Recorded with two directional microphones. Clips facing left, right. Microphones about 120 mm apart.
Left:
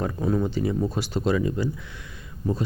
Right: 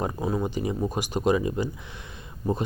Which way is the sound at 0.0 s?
20° right (ahead or behind).